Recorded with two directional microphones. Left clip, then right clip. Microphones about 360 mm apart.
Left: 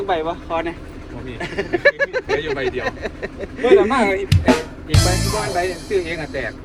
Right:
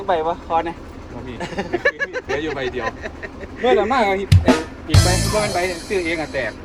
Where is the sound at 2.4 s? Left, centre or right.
Right.